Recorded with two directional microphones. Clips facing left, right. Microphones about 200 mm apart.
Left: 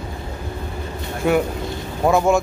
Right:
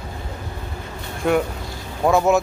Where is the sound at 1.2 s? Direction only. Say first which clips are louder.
Left 1 dB; 10° left (ahead or behind).